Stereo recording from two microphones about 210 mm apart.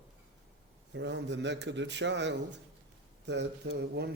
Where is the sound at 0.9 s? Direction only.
55° right (ahead or behind).